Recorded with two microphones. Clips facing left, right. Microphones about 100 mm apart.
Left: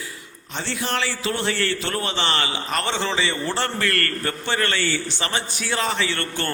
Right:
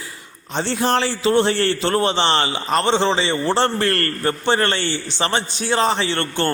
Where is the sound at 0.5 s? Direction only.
30° right (ahead or behind).